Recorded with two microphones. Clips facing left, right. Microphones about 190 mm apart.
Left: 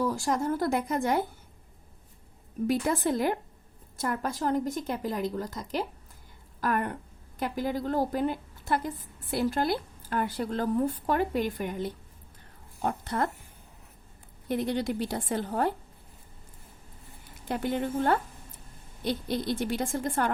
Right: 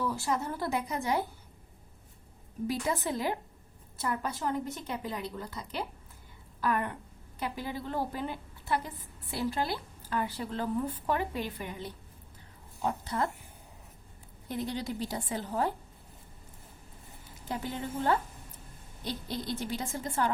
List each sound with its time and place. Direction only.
0.0 s a woman's voice: 45° left (ahead or behind)
2.6 s a woman's voice: 50° left (ahead or behind)
6.6 s a woman's voice: 45° left (ahead or behind)
12.8 s a woman's voice: 55° left (ahead or behind)
14.4 s a woman's voice: 65° left (ahead or behind)
17.5 s a woman's voice: 60° left (ahead or behind)